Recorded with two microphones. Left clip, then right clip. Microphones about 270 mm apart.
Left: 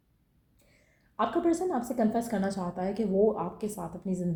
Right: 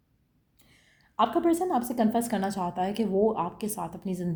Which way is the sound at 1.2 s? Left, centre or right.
Right.